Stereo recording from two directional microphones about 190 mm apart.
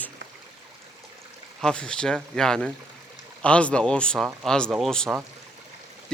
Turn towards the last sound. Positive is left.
turn(degrees=0)  # may be behind; listen again after turning